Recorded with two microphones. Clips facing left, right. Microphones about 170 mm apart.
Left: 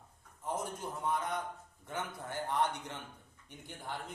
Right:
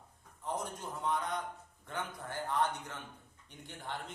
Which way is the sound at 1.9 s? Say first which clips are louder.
Left 1 dB; 15° left (ahead or behind).